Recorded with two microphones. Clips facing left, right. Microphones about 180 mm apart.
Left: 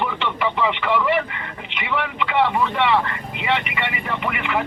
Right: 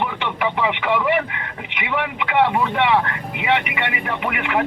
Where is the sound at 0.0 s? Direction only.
15° right (ahead or behind).